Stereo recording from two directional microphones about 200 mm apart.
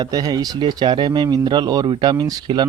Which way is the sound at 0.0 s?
20° right (ahead or behind).